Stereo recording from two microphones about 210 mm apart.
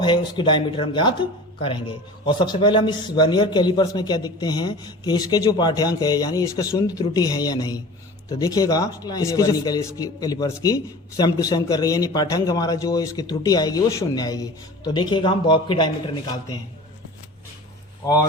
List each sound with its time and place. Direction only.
0.0 s a man's voice: 20° left (ahead or behind)
18.0 s speech: 20° left (ahead or behind)